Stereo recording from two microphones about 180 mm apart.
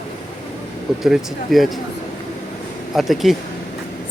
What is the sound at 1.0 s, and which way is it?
Speech, centre (ahead or behind).